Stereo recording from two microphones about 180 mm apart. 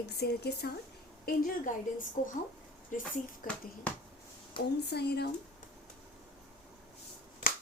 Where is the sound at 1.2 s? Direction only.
45° left (ahead or behind).